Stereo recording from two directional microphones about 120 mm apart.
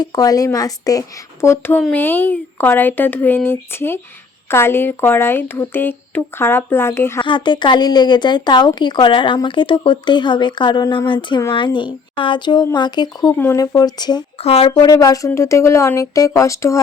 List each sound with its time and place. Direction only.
0.0 s speech: 30° left (ahead or behind)
7.2 s speech: 40° left (ahead or behind)
13.3 s speech: 15° left (ahead or behind)
13.6 s speech: 30° left (ahead or behind)
14.3 s speech: 55° left (ahead or behind)
14.9 s speech: 30° left (ahead or behind)